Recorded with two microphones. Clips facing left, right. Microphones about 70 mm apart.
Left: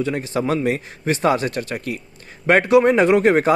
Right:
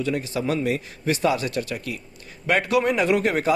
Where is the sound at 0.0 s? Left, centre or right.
Left.